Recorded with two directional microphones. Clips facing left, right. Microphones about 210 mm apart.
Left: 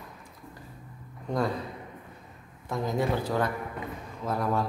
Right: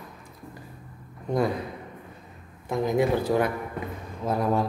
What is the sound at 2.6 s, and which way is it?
A man's voice, 15° right (ahead or behind).